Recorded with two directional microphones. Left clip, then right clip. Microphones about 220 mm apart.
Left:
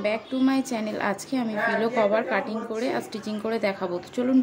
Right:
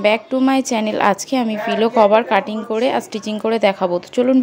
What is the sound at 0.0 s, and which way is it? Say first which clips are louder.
Speech: right 10 dB; 35° right (ahead or behind).